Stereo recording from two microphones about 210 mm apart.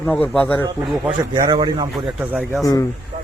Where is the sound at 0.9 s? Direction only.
15° right (ahead or behind).